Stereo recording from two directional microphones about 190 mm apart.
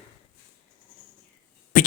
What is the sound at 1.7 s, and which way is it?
Beatboxing, 45° left (ahead or behind).